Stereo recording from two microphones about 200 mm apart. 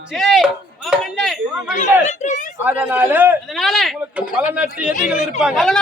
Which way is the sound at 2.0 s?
35° left (ahead or behind).